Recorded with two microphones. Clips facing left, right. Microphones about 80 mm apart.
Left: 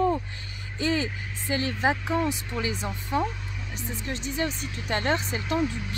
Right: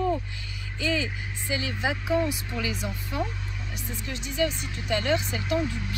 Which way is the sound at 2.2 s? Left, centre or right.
Left.